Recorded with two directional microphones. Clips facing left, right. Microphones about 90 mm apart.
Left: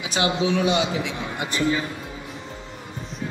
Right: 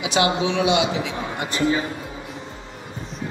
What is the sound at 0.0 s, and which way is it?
Speech, 35° left (ahead or behind).